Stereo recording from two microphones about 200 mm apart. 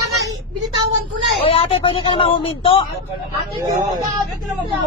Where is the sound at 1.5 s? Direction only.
30° left (ahead or behind).